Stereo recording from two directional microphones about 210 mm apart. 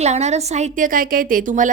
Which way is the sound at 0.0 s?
30° right (ahead or behind).